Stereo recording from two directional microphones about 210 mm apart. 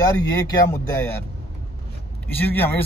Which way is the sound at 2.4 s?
10° left (ahead or behind).